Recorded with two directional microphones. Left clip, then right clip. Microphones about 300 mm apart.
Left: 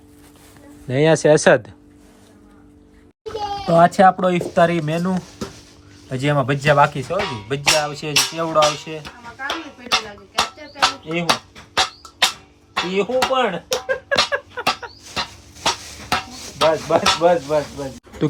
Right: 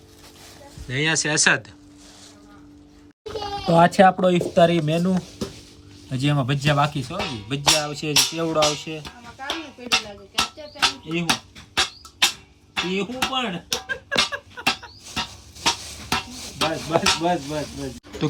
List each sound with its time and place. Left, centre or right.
0.9 s speech: centre
3.3 s a child's voice: centre
6.1 s music: centre
12.7 s a sound: centre
16.3 s a sound: centre
17.0 s speech: centre